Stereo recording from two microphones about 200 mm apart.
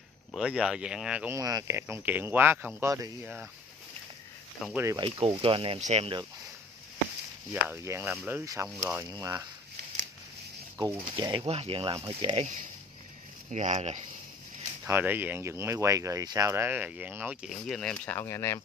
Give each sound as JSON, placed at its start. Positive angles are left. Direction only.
{"t": 0.3, "sound": "speech", "side_deg": -5}
{"t": 4.7, "sound": "speech", "side_deg": -15}
{"t": 7.7, "sound": "speech", "side_deg": -10}
{"t": 11.0, "sound": "speech", "side_deg": -25}
{"t": 14.9, "sound": "speech", "side_deg": -10}